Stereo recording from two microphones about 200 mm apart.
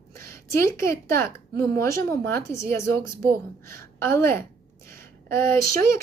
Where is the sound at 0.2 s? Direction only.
15° left (ahead or behind).